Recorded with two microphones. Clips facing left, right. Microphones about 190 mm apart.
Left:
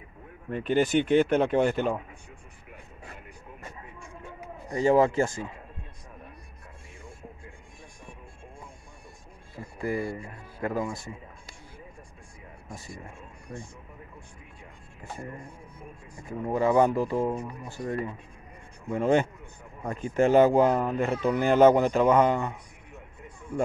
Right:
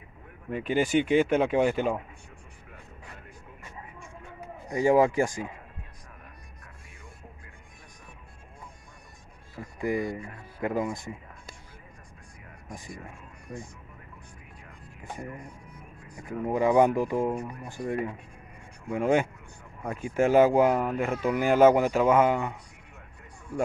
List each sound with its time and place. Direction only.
0.5 s speech: 10° right (ahead or behind)
4.6 s speech: 15° right (ahead or behind)
9.8 s speech: 20° right (ahead or behind)
16.3 s speech: 15° right (ahead or behind)